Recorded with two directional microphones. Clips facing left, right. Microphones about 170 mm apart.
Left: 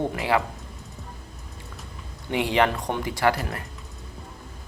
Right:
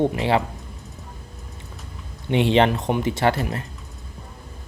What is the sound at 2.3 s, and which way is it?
Speech, 25° right (ahead or behind).